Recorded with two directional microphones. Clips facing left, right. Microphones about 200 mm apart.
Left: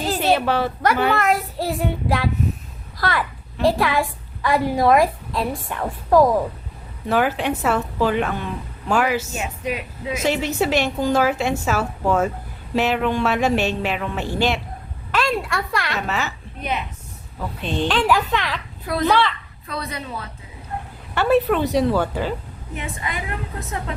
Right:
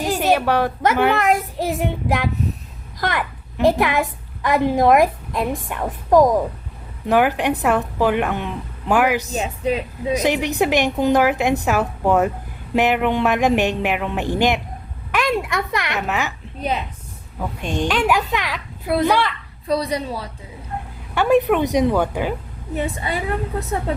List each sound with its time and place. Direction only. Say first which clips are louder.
0.0 s a child's voice: right 1 dB; 15° right (ahead or behind)
9.3 s a woman's voice: right 5 dB; 30° right (ahead or behind)
10.2 s a woman's voice: right 1 dB; 15° right (ahead or behind)
16.6 s a woman's voice: right 3 dB; 30° right (ahead or behind)
17.6 s a woman's voice: even; 10° right (ahead or behind)
19.6 s a woman's voice: right 9 dB; 35° right (ahead or behind)
21.2 s a woman's voice: right 2 dB; 10° right (ahead or behind)
22.7 s a woman's voice: right 6 dB; 35° right (ahead or behind)